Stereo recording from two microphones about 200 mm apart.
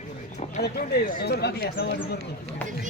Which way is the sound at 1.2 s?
55° left (ahead or behind).